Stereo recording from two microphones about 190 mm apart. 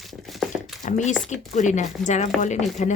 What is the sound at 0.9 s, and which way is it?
Speech, 40° left (ahead or behind).